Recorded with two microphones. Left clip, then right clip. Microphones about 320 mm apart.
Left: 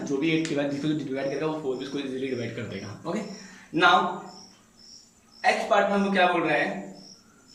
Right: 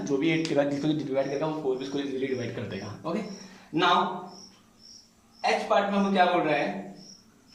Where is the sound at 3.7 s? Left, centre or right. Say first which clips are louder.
Left 4 dB; centre.